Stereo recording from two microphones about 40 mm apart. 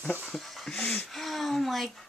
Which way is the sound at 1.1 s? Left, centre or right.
Centre.